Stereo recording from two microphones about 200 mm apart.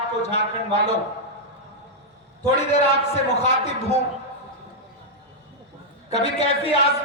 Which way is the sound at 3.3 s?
30° left (ahead or behind).